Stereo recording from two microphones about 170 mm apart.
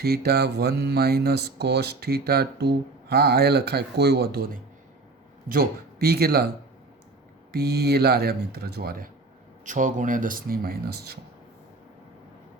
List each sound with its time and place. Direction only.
0.0 s speech: 65° right (ahead or behind)
7.5 s speech: 70° right (ahead or behind)
9.6 s speech: 50° right (ahead or behind); by 11.2 s 65° right (ahead or behind)